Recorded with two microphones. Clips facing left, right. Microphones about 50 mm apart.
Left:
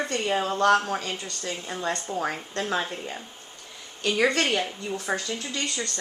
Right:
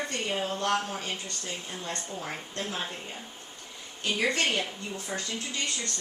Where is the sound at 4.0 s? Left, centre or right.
Left.